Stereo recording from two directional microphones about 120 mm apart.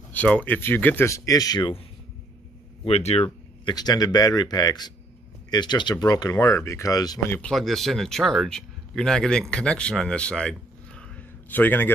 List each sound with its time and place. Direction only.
0.1 s speech: 10° left (ahead or behind); by 1.7 s 35° left (ahead or behind)
2.8 s speech: 60° left (ahead or behind)
3.6 s speech: 35° left (ahead or behind)
7.2 s speech: 15° left (ahead or behind)
7.5 s speech: centre (ahead or behind)
11.0 s a sound: 15° left (ahead or behind)